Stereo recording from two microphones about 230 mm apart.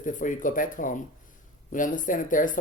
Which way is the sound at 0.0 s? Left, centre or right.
Left.